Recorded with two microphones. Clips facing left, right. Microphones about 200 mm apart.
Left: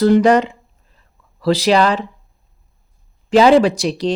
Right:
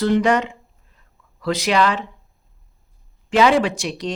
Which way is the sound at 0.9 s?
30° left (ahead or behind).